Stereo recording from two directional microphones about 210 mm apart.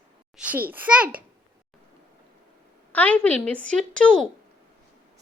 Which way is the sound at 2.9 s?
5° left (ahead or behind).